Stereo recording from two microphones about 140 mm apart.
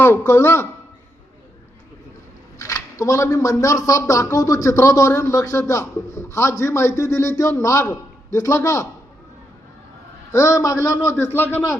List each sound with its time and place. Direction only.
0.0 s a man's voice: 15° left (ahead or behind)
2.6 s speech: 20° left (ahead or behind)
10.3 s a man's voice: 20° left (ahead or behind)